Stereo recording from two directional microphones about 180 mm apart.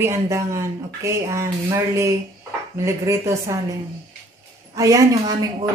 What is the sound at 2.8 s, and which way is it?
Speech, 15° right (ahead or behind).